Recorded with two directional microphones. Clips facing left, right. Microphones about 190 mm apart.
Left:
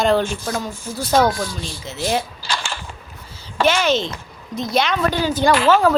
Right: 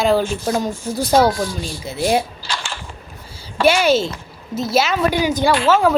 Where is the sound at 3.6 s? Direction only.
10° right (ahead or behind).